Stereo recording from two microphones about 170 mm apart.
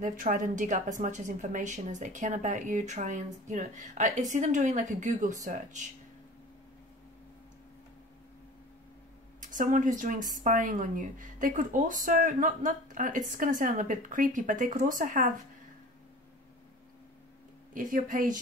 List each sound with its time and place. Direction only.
0.0 s a woman's voice: 50° right (ahead or behind)
9.4 s a woman's voice: 50° right (ahead or behind)
17.7 s a woman's voice: 55° right (ahead or behind)